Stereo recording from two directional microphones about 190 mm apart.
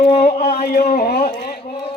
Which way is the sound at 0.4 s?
50° left (ahead or behind).